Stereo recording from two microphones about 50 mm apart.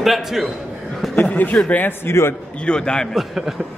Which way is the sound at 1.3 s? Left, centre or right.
Left.